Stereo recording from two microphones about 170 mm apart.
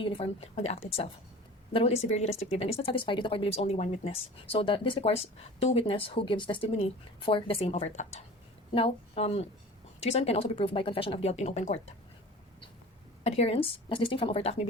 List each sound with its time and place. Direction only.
0.0 s speech: 35° left (ahead or behind)
13.2 s speech: 40° left (ahead or behind)